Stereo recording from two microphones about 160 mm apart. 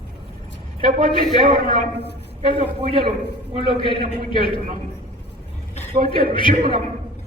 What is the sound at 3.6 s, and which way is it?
A man's voice, 35° left (ahead or behind).